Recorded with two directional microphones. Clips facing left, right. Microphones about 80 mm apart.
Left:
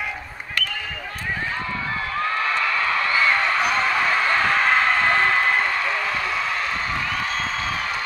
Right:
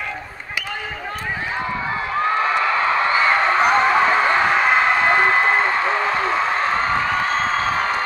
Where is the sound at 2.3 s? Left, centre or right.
Right.